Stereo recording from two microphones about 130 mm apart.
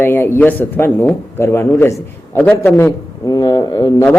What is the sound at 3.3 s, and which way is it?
Speech, 30° left (ahead or behind).